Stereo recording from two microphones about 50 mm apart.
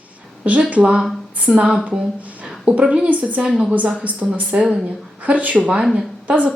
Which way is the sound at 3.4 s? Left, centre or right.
Centre.